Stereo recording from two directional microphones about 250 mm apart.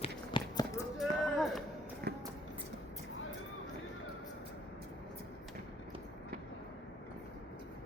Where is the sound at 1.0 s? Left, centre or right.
Centre.